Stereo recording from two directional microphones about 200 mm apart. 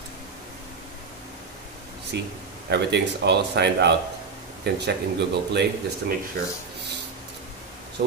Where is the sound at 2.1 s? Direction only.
55° right (ahead or behind).